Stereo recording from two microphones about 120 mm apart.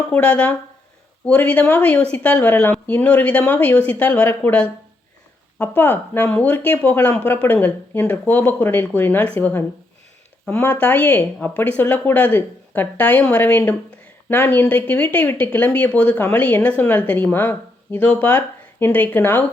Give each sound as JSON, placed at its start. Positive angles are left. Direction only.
{"t": 0.1, "sound": "speech", "side_deg": 10}
{"t": 5.5, "sound": "speech", "side_deg": 15}